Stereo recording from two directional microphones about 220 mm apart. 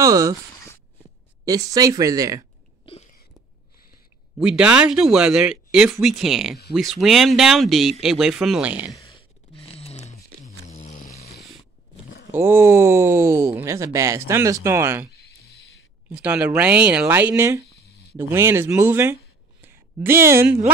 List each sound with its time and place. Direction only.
0.0 s speech: 15° right (ahead or behind)
1.4 s speech: 15° right (ahead or behind)
2.8 s a sound: 25° left (ahead or behind)
4.4 s speech: 5° right (ahead or behind)
8.9 s a sound: 20° left (ahead or behind)
10.7 s vehicle: 30° left (ahead or behind)
12.3 s speech: 10° right (ahead or behind)
16.1 s a woman's voice: 5° right (ahead or behind)